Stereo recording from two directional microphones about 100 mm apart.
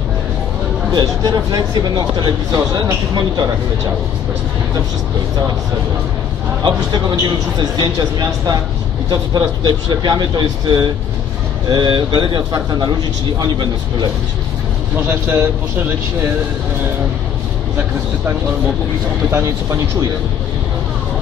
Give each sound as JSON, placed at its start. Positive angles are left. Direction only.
{"t": 0.9, "sound": "speech", "side_deg": -40}
{"t": 7.5, "sound": "speech", "side_deg": -45}
{"t": 15.0, "sound": "speech", "side_deg": -20}
{"t": 19.3, "sound": "speech", "side_deg": -30}